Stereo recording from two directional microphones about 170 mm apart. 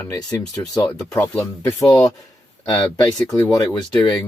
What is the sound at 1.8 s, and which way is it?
Speech, centre (ahead or behind).